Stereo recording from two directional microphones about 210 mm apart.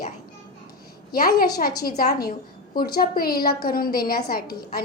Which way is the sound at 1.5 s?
45° left (ahead or behind).